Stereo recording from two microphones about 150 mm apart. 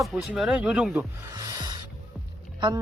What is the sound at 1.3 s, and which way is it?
Music, 20° right (ahead or behind).